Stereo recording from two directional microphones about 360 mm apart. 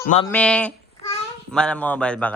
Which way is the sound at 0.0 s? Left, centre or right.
Centre.